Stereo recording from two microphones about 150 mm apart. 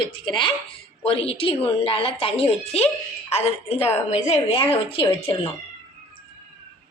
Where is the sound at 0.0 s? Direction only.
30° left (ahead or behind).